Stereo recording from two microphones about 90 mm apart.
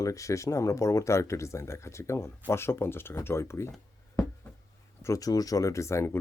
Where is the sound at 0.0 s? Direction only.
35° left (ahead or behind).